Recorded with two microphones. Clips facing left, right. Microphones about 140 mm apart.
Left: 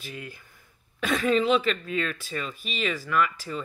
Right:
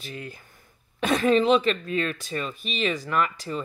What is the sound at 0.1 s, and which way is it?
Speech, 40° right (ahead or behind).